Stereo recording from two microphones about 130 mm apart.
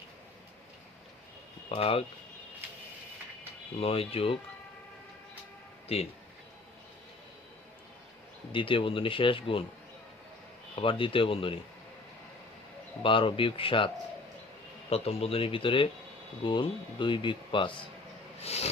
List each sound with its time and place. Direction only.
1.7 s speech: 45° left (ahead or behind)
3.8 s speech: 45° left (ahead or behind)
8.5 s speech: 40° left (ahead or behind)
10.8 s speech: 40° left (ahead or behind)
13.0 s speech: 40° left (ahead or behind)
18.4 s speech: 55° left (ahead or behind)